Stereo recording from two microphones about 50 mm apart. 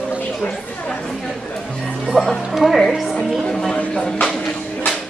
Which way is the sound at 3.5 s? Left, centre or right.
Centre.